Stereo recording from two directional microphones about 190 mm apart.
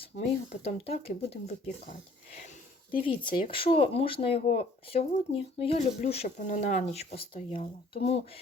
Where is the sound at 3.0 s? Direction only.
25° left (ahead or behind).